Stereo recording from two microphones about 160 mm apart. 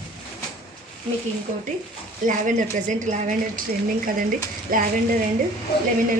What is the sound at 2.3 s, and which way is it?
A woman's voice, 55° right (ahead or behind).